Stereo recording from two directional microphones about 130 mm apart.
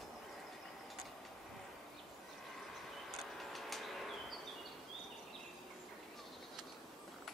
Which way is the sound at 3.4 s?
Centre (ahead or behind).